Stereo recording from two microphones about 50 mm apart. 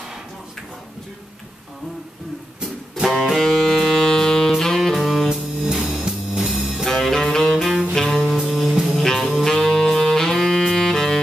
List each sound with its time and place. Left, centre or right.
3.3 s saxophone: centre
5.3 s music: centre
6.9 s music: centre
9.4 s saxophone: centre